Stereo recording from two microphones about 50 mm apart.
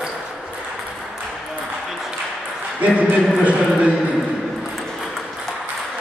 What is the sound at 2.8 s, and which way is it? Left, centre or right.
Speech, right.